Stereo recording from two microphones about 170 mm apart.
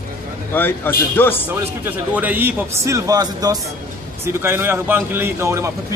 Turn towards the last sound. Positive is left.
turn(degrees=-15)  # may be behind; listen again after turning